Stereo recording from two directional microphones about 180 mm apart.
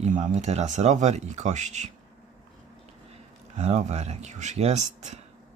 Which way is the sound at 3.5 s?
40° right (ahead or behind).